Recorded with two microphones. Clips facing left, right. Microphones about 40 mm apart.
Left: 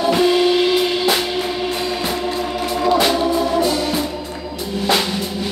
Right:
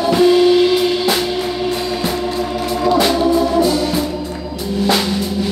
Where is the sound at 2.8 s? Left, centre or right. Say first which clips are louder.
Right 2 dB; left.